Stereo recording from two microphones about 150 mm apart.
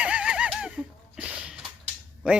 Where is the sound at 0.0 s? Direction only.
10° right (ahead or behind).